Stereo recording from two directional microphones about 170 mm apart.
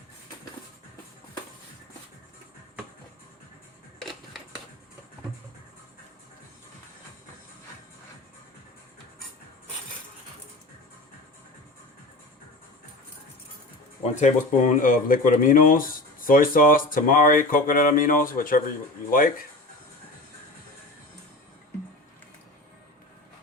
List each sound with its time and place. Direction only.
14.0 s speech: 45° left (ahead or behind)